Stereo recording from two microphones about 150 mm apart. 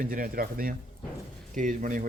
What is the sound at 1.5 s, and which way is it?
Speech, 60° right (ahead or behind).